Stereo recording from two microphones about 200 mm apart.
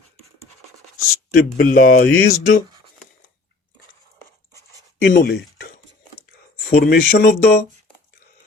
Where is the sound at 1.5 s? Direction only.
50° left (ahead or behind).